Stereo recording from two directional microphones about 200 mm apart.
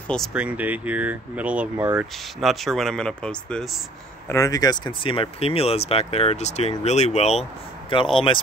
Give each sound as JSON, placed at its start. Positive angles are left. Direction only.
{"t": 0.1, "sound": "speech", "side_deg": 0}
{"t": 4.3, "sound": "speech", "side_deg": 15}